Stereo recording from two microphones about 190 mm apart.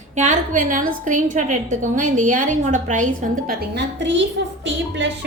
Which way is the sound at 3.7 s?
70° right (ahead or behind).